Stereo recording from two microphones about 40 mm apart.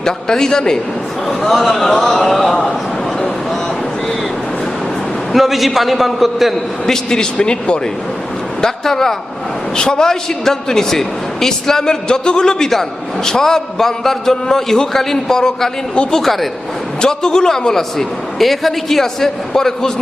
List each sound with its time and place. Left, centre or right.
0.0 s a man's voice: centre
1.3 s a man's voice: centre
5.3 s a man's voice: centre
6.8 s speech: centre
8.6 s a man's voice: centre
17.0 s a man's voice: centre
17.9 s a man's voice: centre